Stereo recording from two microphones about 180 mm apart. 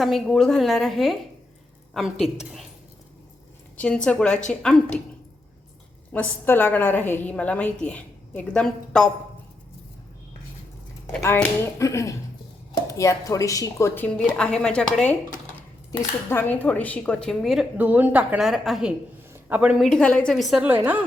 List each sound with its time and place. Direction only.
0.0 s a woman's voice: centre (ahead or behind)
3.8 s a woman's voice: 5° left (ahead or behind)
6.1 s a woman's voice: 10° left (ahead or behind)
11.0 s a woman's voice: 10° left (ahead or behind)
17.7 s a woman's voice: 10° right (ahead or behind)